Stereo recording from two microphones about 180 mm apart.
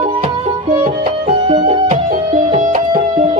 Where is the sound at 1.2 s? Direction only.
30° right (ahead or behind).